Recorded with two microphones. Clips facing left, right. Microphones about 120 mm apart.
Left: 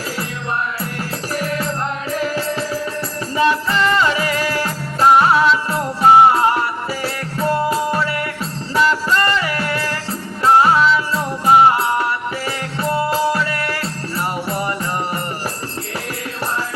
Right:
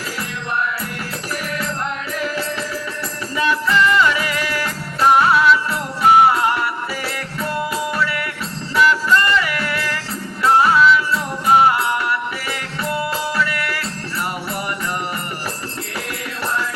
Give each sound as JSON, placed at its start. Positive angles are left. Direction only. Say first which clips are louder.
{"t": 1.4, "sound": "music", "louder": "left 4 dB", "side_deg": 35}